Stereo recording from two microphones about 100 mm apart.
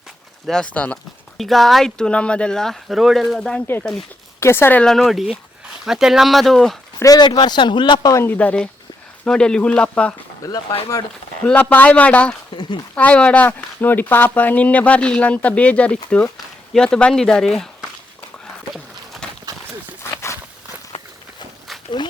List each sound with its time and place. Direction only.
0.4 s speech: 5° left (ahead or behind)
0.7 s speech: 15° left (ahead or behind)
1.4 s speech: centre (ahead or behind)
4.4 s speech: 25° left (ahead or behind)
4.8 s speech: centre (ahead or behind)
7.0 s speech: 40° left (ahead or behind)
8.1 s speech: 25° left (ahead or behind)
8.4 s speech: 10° left (ahead or behind)
11.4 s speech: 15° left (ahead or behind)
19.2 s run: 5° left (ahead or behind)